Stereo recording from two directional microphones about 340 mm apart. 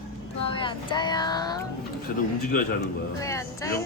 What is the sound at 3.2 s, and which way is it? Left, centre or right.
Speech, centre.